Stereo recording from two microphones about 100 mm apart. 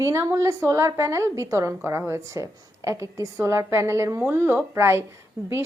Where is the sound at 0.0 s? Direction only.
30° right (ahead or behind).